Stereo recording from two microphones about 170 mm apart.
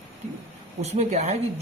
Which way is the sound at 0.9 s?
40° right (ahead or behind).